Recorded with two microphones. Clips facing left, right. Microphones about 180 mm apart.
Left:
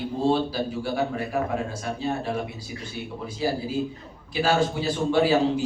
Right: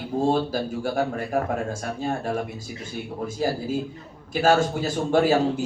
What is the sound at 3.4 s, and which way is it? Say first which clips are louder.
A man's voice: even; 45° right (ahead or behind).